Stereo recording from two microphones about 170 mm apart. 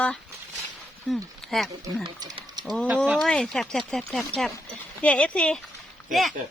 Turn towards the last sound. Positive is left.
turn(degrees=0)  # may be behind; listen again after turning